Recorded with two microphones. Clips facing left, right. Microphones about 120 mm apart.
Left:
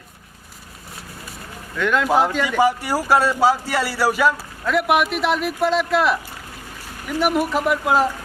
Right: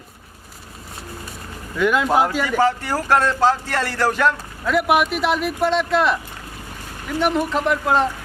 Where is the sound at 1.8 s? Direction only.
5° right (ahead or behind).